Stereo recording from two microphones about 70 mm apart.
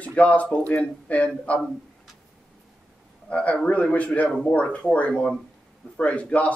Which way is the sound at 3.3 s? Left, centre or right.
Centre.